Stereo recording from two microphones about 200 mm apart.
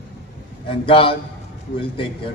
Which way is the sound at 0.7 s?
25° left (ahead or behind).